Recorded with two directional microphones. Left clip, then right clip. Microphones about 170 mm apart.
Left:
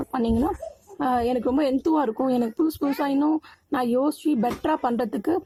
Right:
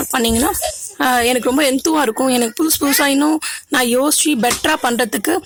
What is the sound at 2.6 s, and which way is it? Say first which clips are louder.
Speech: right 9 dB; 35° right (ahead or behind).